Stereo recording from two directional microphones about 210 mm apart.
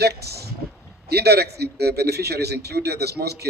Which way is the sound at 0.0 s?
50° right (ahead or behind).